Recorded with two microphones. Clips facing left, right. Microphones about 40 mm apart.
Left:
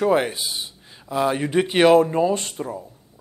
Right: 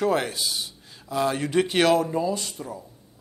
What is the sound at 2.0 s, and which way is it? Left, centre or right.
Speech, left.